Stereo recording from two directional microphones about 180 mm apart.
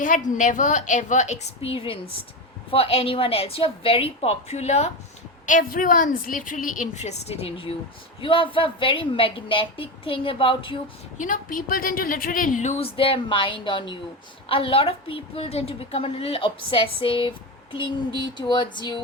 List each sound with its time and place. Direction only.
0.0 s a woman's voice: 45° left (ahead or behind)
5.5 s a woman's voice: 50° left (ahead or behind); by 10.8 s 30° left (ahead or behind)
11.2 s a woman's voice: 50° left (ahead or behind); by 19.0 s 25° left (ahead or behind)